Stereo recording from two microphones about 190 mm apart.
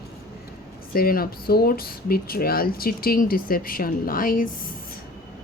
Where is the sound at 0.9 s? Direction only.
50° left (ahead or behind).